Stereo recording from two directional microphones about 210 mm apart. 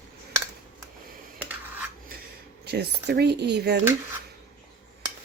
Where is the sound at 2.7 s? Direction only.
50° right (ahead or behind).